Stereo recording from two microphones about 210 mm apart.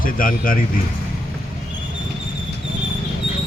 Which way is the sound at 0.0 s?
40° left (ahead or behind).